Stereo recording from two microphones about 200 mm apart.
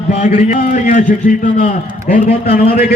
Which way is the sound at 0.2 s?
35° left (ahead or behind).